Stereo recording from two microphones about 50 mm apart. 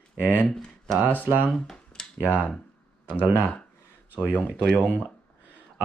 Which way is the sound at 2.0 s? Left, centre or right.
Centre.